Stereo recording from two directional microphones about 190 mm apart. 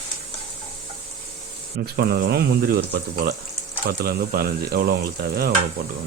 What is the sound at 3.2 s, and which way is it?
Frying, 50° right (ahead or behind).